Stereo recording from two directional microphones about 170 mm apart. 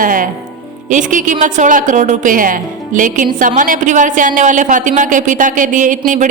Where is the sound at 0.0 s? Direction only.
50° right (ahead or behind).